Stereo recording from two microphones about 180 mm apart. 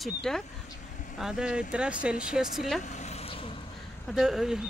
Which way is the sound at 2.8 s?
40° left (ahead or behind).